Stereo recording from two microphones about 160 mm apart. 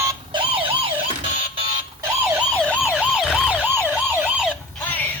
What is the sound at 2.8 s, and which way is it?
Emergency vehicle, 5° right (ahead or behind).